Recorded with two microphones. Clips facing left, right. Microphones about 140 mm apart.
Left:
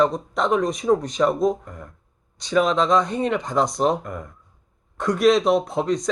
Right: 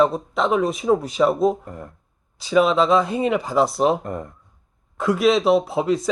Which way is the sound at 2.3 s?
5° right (ahead or behind).